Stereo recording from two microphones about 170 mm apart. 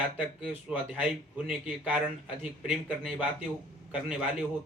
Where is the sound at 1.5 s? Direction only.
5° right (ahead or behind).